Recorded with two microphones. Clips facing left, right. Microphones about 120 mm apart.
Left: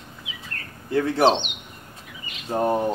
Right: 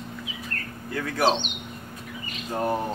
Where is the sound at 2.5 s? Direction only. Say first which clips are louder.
Left 4 dB; 25° left (ahead or behind).